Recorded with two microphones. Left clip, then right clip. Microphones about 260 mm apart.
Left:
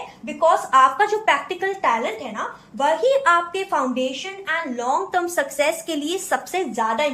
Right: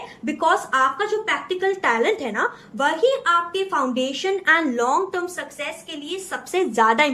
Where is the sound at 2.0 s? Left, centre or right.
Centre.